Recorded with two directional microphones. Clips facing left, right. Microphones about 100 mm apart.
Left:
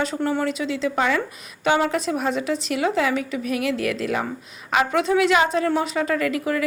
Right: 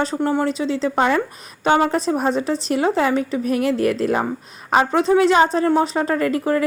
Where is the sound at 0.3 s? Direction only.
30° right (ahead or behind).